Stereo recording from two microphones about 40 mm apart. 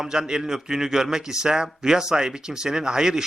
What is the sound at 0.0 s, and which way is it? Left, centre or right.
A man's voice, centre.